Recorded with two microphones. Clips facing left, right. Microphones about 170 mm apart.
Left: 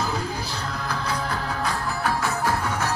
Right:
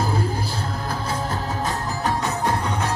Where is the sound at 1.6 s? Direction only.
20° right (ahead or behind).